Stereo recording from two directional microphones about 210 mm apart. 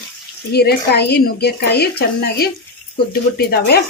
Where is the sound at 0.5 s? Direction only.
50° left (ahead or behind).